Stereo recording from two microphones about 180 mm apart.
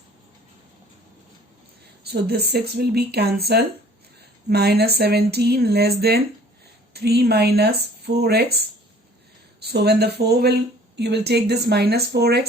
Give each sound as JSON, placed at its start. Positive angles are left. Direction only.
{"t": 2.0, "sound": "speech", "side_deg": -65}